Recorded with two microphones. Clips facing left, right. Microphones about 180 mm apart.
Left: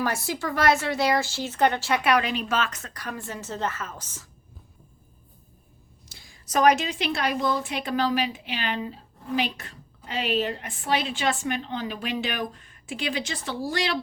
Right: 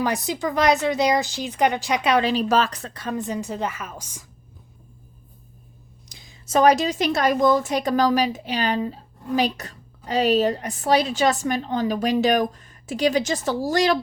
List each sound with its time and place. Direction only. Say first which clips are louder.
0.0 s speech: right 4 dB; 20° right (ahead or behind)
6.1 s a woman's voice: right 7 dB; 20° right (ahead or behind); by 14.0 s 45° right (ahead or behind)